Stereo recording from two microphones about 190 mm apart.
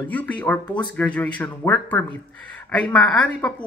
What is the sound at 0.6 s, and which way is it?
Speech, 25° left (ahead or behind).